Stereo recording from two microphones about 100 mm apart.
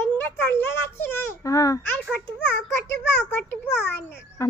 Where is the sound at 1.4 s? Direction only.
35° left (ahead or behind).